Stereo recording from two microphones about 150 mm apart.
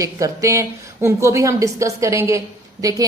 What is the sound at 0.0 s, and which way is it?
A woman's voice, 20° right (ahead or behind).